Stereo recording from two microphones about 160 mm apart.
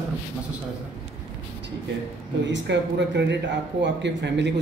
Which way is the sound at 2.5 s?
90° right.